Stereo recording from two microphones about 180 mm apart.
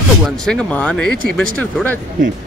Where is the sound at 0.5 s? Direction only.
5° left (ahead or behind).